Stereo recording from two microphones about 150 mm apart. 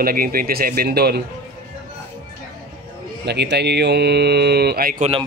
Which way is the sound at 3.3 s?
90° right.